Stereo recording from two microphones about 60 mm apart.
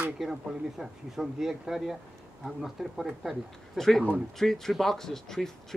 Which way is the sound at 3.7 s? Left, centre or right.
Centre.